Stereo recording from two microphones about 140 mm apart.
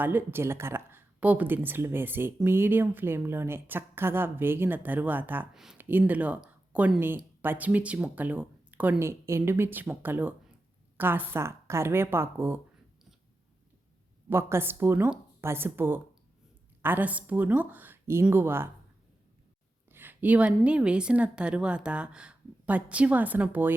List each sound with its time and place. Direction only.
0.0 s speech: 15° right (ahead or behind)
14.3 s speech: 15° right (ahead or behind)
19.9 s a sound: 15° right (ahead or behind)
20.7 s speech: 10° right (ahead or behind)